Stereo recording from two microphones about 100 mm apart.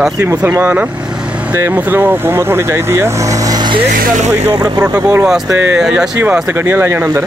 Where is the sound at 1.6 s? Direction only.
20° right (ahead or behind).